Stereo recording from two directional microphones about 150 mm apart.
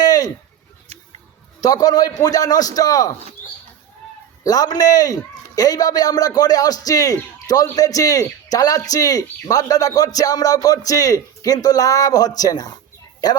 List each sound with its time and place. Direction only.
0.0 s a sound: 25° left (ahead or behind)
1.6 s a man's voice: 25° left (ahead or behind)
4.4 s a man's voice: 25° left (ahead or behind)